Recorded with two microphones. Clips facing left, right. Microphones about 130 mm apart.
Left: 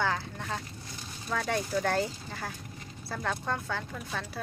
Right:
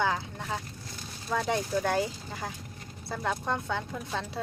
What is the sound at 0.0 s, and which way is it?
Speech, 15° right (ahead or behind).